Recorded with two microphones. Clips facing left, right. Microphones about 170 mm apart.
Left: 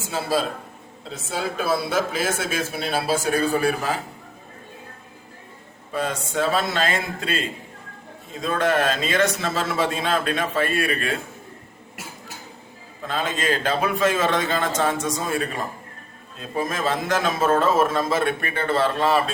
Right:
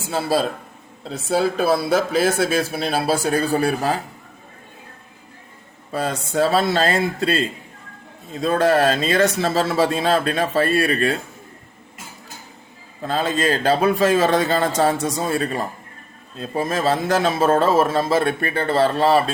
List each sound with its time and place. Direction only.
1.3 s a man's voice: 35° right (ahead or behind)
5.9 s a man's voice: 35° right (ahead or behind)
13.0 s a man's voice: 35° right (ahead or behind)
16.4 s a man's voice: 35° right (ahead or behind)